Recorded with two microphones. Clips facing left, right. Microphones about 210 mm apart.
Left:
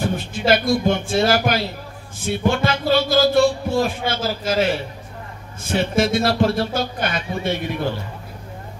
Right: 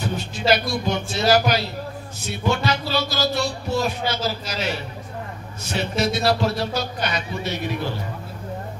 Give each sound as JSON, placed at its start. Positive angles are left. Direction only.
{"t": 0.0, "sound": "speech", "side_deg": 50}